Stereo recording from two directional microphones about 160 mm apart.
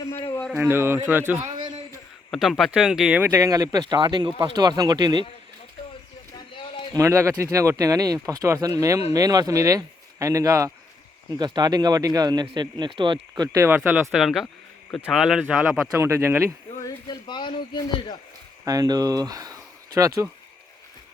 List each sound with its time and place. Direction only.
0.5 s speech: 15° right (ahead or behind)
2.3 s speech: centre (ahead or behind); by 5.2 s 25° right (ahead or behind)
6.9 s speech: 20° right (ahead or behind); by 14.4 s centre (ahead or behind)
14.4 s a sound: 15° left (ahead or behind)
15.0 s speech: 5° right (ahead or behind)
16.8 s speech: 25° left (ahead or behind)
18.6 s speech: 20° right (ahead or behind)